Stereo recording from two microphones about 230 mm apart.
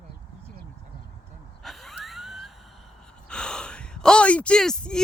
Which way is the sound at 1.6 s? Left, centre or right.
Centre.